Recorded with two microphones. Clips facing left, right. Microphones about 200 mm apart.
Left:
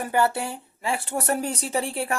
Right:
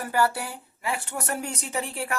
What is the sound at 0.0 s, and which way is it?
Speech, 25° left (ahead or behind).